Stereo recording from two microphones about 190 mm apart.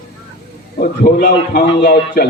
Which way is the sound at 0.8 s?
50° left (ahead or behind).